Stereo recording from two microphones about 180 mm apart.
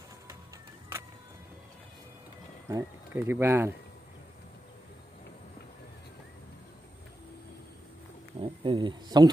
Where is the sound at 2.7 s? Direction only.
15° right (ahead or behind).